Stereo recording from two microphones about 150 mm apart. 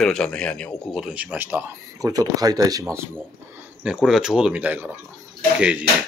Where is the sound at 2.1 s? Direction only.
25° right (ahead or behind).